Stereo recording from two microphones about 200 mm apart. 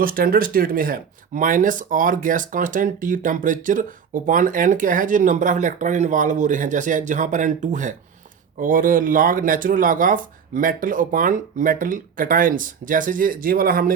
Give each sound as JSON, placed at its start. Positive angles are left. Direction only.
{"t": 0.0, "sound": "speech", "side_deg": -45}